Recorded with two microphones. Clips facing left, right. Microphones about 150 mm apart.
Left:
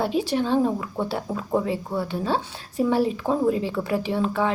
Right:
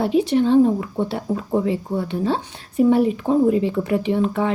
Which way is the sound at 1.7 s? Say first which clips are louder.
Right 3 dB; 60° right (ahead or behind).